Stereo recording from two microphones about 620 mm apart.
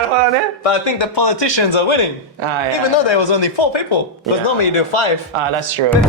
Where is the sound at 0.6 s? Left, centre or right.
Left.